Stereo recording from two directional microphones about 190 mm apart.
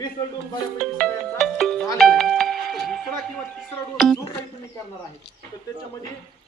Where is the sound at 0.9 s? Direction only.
Centre (ahead or behind).